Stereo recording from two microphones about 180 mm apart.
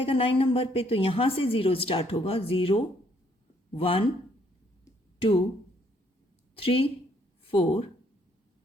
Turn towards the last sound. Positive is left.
turn(degrees=30)  # may be behind; listen again after turning